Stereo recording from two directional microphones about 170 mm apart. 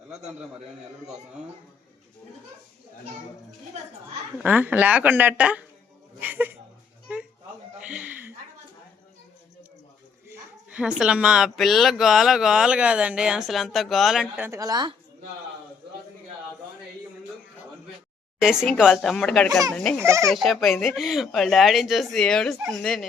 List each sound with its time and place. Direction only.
4.4 s speech: 10° right (ahead or behind)
7.1 s a sound: 5° right (ahead or behind)
10.2 s a sound: 10° right (ahead or behind)
11.0 s speech: 5° right (ahead or behind)
14.5 s a woman's voice: 20° right (ahead or behind)
18.3 s speech: 5° right (ahead or behind)
20.0 s speech: 15° right (ahead or behind)
20.3 s speech: centre (ahead or behind)